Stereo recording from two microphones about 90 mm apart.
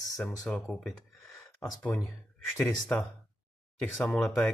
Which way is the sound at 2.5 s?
20° left (ahead or behind).